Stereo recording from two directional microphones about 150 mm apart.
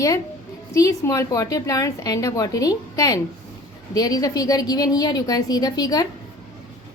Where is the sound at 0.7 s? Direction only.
20° left (ahead or behind).